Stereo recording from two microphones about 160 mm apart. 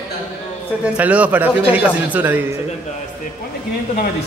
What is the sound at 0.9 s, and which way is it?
Speech, 10° right (ahead or behind).